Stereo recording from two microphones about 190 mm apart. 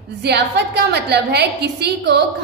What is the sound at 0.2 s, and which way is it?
A woman's voice, 60° right (ahead or behind).